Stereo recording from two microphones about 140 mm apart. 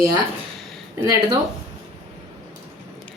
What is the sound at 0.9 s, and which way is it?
Speech, 25° right (ahead or behind).